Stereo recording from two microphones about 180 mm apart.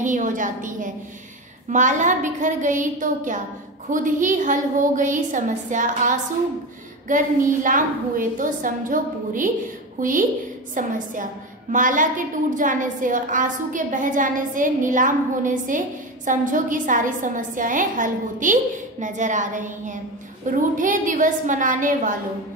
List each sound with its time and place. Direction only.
0.0 s a woman's voice: 45° right (ahead or behind)